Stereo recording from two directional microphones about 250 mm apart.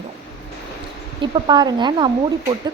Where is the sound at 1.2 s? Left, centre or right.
Centre.